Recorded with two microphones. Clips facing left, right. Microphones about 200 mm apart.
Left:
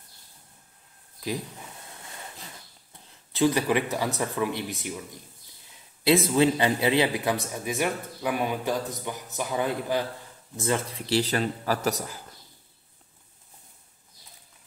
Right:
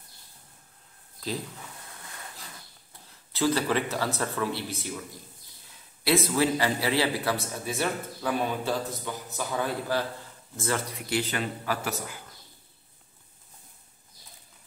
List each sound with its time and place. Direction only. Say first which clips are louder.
3.3 s a man's voice: left 3 dB; 15° left (ahead or behind)
6.0 s a man's voice: left 4 dB; 20° left (ahead or behind)
11.0 s speech: left 4 dB; 35° left (ahead or behind)